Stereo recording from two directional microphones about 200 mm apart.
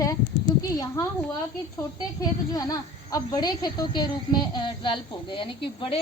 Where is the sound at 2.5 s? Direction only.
20° left (ahead or behind).